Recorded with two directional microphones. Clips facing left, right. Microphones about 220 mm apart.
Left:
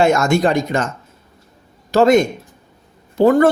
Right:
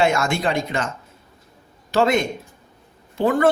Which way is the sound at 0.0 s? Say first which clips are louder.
Left 6 dB; 45° left (ahead or behind).